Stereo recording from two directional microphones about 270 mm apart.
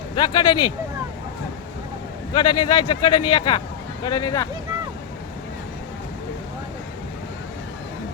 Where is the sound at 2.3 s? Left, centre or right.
Centre.